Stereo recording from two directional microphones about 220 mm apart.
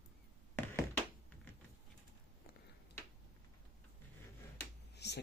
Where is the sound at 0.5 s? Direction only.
10° left (ahead or behind).